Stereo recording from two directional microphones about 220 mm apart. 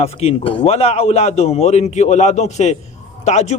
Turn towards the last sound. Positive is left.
turn(degrees=30)  # may be behind; listen again after turning